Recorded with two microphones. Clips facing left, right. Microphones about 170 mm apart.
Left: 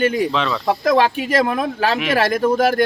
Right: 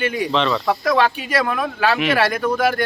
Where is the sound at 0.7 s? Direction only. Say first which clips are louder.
Left 2 dB; 40° left (ahead or behind).